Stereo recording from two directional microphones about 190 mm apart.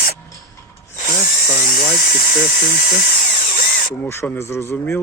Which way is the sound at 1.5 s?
50° left (ahead or behind).